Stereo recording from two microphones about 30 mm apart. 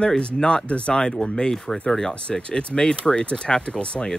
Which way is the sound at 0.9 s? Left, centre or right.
Left.